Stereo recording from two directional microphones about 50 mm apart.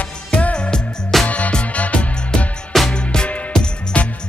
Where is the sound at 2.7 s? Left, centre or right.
Centre; by 4.1 s left.